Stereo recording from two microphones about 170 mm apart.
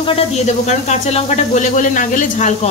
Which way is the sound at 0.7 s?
40° left (ahead or behind).